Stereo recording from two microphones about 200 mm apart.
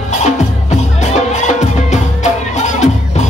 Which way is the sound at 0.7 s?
35° left (ahead or behind).